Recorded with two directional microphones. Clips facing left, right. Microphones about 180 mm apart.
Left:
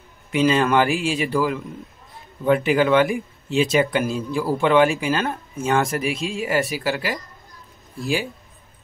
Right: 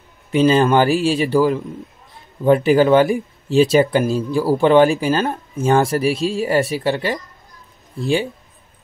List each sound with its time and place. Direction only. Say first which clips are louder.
0.3 s speech: right 4 dB; 35° right (ahead or behind)